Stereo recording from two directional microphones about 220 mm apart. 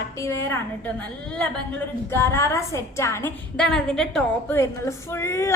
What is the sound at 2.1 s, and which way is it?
A woman's voice, 10° left (ahead or behind).